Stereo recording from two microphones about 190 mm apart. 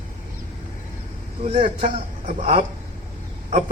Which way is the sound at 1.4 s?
35° right (ahead or behind).